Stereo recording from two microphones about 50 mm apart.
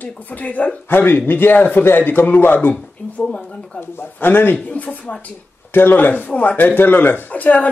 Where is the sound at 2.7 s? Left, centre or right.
Left.